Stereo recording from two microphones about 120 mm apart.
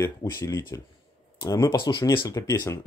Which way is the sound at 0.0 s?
25° left (ahead or behind).